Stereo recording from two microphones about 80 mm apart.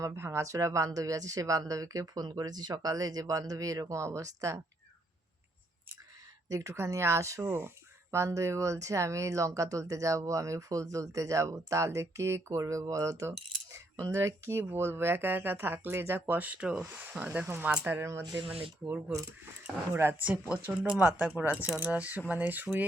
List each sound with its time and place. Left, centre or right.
0.0 s speech: right
2.3 s speech: right
6.5 s speech: right
7.4 s speech: right
8.1 s speech: right; by 17.2 s centre
17.8 s speech: right
20.5 s speech: centre